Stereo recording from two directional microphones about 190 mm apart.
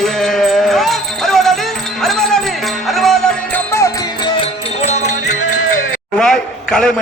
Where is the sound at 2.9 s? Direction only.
Centre (ahead or behind).